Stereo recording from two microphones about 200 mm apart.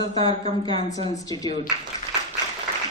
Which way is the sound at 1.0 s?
20° left (ahead or behind).